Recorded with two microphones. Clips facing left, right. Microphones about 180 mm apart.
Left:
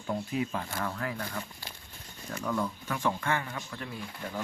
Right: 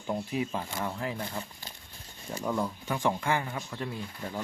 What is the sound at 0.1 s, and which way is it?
Speech, 20° right (ahead or behind).